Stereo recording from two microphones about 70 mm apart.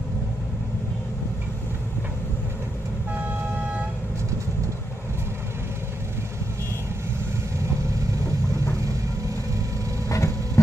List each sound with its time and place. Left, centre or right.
10.1 s vehicle: left